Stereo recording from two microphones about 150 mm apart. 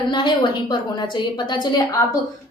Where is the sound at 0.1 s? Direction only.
30° left (ahead or behind).